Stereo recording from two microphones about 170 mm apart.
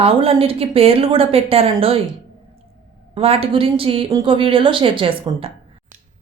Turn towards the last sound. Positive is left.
turn(degrees=-35)  # may be behind; listen again after turning